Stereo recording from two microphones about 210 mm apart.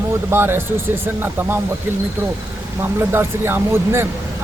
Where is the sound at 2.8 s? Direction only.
10° right (ahead or behind).